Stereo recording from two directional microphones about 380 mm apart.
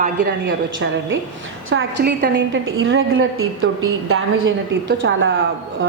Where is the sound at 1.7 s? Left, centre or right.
Right.